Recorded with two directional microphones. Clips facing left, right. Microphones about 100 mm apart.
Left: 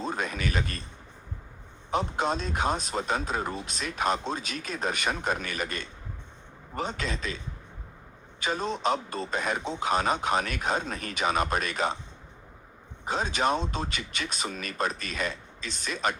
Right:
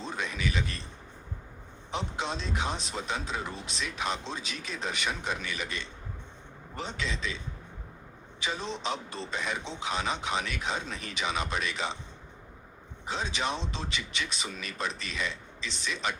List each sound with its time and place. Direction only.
0.0 s a sound: 45° left (ahead or behind)
1.9 s speech: 45° left (ahead or behind)
8.4 s speech: 45° left (ahead or behind)
13.1 s speech: 50° left (ahead or behind)